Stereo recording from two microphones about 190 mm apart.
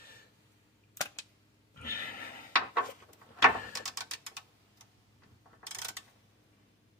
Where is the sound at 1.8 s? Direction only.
50° left (ahead or behind).